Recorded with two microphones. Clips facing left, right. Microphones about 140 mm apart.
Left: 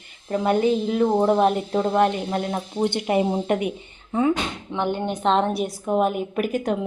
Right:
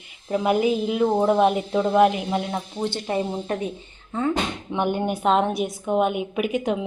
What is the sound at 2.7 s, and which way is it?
Speech, 15° left (ahead or behind).